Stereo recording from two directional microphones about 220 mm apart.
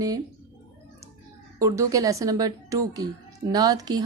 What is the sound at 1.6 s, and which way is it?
A woman's voice, 15° right (ahead or behind).